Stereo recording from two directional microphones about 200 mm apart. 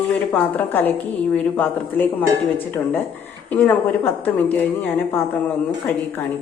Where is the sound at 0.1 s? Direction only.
10° left (ahead or behind).